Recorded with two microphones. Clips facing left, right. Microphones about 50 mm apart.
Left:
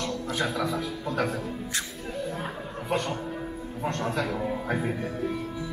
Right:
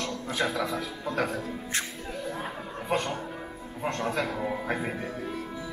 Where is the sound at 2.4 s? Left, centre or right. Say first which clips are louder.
Left 1 dB; centre.